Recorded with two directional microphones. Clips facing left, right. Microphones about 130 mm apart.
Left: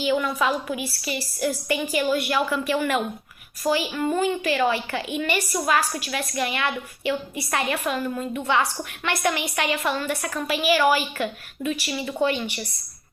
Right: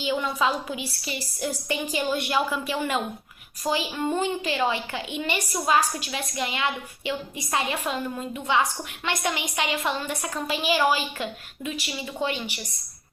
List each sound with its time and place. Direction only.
0.0 s a woman's voice: 20° right (ahead or behind)